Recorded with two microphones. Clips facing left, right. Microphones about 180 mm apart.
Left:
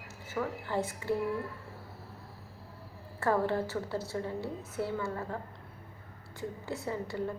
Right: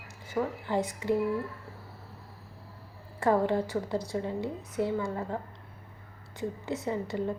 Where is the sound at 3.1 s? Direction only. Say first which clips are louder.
Right 3 dB; 15° right (ahead or behind).